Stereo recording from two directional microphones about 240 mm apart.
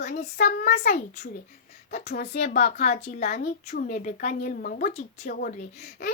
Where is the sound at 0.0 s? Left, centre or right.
Left.